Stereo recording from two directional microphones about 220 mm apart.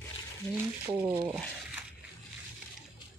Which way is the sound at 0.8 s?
15° right (ahead or behind).